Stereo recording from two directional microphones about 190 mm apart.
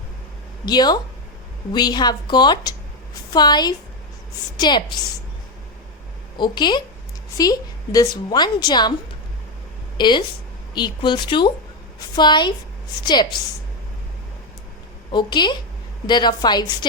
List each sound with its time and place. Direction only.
0.6 s a woman's voice: 20° left (ahead or behind)
6.3 s a woman's voice: 25° left (ahead or behind)
10.0 s a woman's voice: 25° left (ahead or behind)
15.1 s a woman's voice: 25° left (ahead or behind)